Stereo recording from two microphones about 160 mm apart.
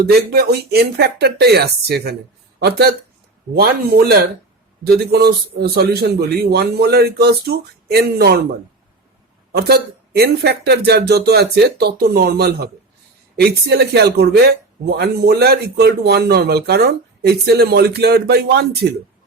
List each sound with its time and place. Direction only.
0.0 s a man's voice: 80° right
9.5 s a man's voice: 90° right